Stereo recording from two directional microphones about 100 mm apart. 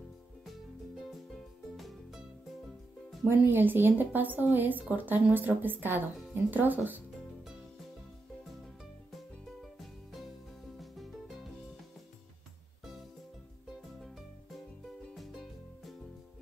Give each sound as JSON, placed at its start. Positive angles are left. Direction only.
{"t": 0.5, "sound": "music", "side_deg": 0}
{"t": 3.3, "sound": "a woman's voice", "side_deg": -20}
{"t": 9.1, "sound": "music", "side_deg": 0}
{"t": 13.7, "sound": "music", "side_deg": 0}